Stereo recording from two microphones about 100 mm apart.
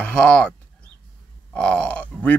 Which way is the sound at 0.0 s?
10° left (ahead or behind).